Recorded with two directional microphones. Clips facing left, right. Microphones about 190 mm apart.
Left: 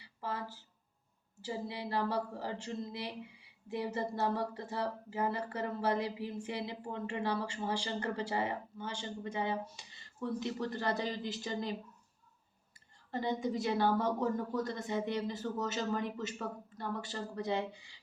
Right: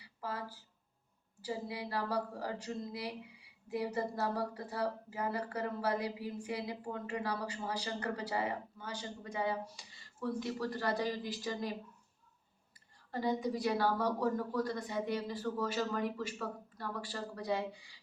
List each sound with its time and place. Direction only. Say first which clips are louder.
0.0 s a sound: left 1 dB; 25° left (ahead or behind)
1.4 s speech: even; 25° left (ahead or behind)
13.1 s speech: even; 25° left (ahead or behind)